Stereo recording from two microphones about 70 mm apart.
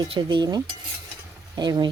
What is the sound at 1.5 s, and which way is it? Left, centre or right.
Speech, right.